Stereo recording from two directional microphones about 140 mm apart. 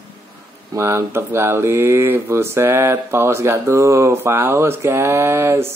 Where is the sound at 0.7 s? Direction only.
20° right (ahead or behind).